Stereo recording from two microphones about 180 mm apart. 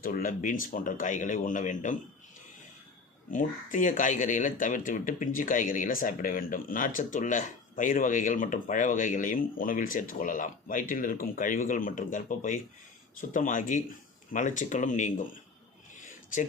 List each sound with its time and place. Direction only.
0.0 s speech: 50° left (ahead or behind)
3.3 s speech: 45° left (ahead or behind)
16.0 s a sound: 45° left (ahead or behind)